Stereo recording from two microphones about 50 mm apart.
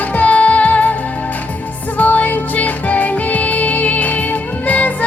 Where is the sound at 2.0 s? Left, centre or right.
Left.